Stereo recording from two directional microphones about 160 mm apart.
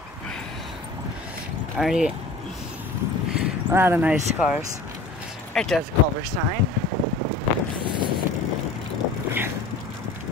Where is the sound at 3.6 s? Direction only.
15° right (ahead or behind).